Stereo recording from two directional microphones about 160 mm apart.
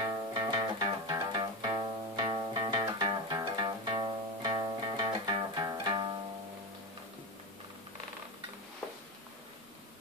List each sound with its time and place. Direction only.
0.3 s music: 25° right (ahead or behind)